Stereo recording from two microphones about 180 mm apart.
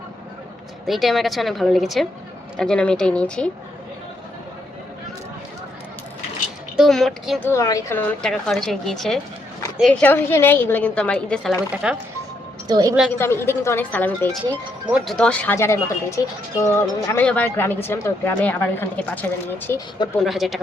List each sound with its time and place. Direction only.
0.9 s a woman's voice: centre (ahead or behind)
6.7 s a woman's voice: centre (ahead or behind)
7.4 s a woman's voice: 15° left (ahead or behind)
11.7 s a woman's voice: 5° right (ahead or behind)
12.6 s a woman's voice: 20° right (ahead or behind)
13.1 s speech: 15° left (ahead or behind)
14.8 s speech: 5° right (ahead or behind)
20.1 s a woman's voice: centre (ahead or behind)